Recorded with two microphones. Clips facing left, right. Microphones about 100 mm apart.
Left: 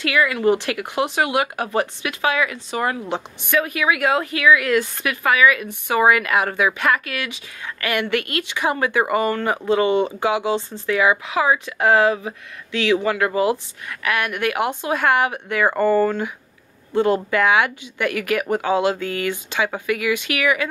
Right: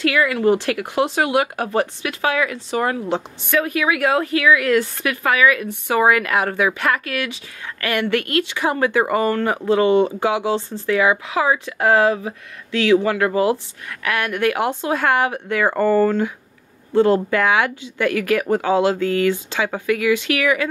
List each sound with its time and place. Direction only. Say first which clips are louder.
0.3 s speech: right 2 dB; 20° left (ahead or behind)